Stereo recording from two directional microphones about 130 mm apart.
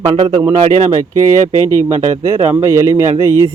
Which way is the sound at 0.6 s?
60° right (ahead or behind).